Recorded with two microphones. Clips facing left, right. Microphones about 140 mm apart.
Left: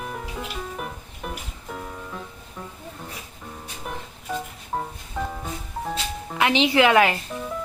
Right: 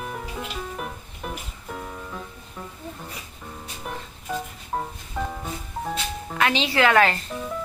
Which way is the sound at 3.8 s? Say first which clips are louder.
Even; centre (ahead or behind).